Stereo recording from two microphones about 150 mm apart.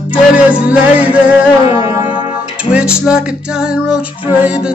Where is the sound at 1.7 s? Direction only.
35° left (ahead or behind).